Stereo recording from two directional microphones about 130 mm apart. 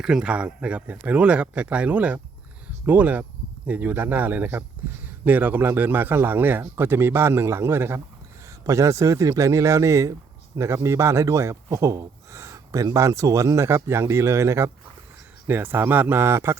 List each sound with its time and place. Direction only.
0.0 s speech: 5° right (ahead or behind)